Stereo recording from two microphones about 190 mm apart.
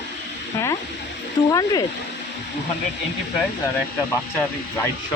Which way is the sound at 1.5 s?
20° left (ahead or behind).